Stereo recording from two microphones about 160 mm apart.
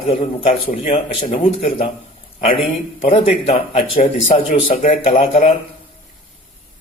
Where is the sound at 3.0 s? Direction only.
40° left (ahead or behind).